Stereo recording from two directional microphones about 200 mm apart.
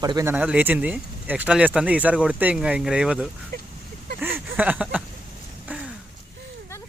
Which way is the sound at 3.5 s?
50° right (ahead or behind).